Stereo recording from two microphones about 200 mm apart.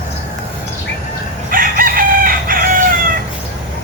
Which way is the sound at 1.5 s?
45° right (ahead or behind).